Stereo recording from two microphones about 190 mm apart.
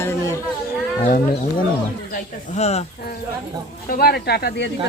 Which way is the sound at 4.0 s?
55° left (ahead or behind).